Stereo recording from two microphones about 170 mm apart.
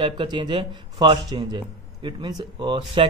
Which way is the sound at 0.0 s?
30° right (ahead or behind).